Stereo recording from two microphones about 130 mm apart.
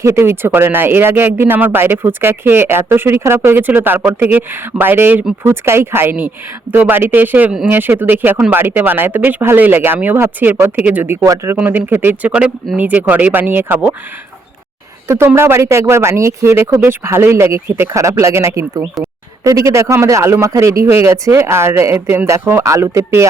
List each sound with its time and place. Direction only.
0.0 s speech: 20° right (ahead or behind)
15.0 s speech: 20° right (ahead or behind)